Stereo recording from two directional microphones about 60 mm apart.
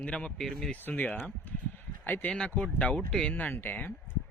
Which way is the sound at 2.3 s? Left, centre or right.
Centre.